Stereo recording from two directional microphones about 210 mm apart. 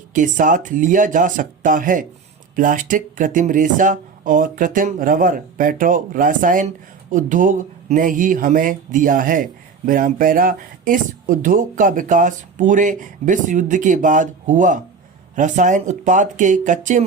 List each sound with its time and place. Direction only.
0.1 s speech: 40° right (ahead or behind)